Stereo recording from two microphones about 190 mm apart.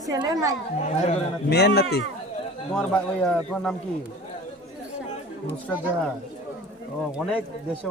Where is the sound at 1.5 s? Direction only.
55° left (ahead or behind).